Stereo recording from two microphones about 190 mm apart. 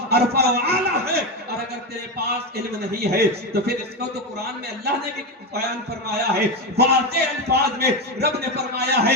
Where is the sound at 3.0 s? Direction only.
55° right (ahead or behind).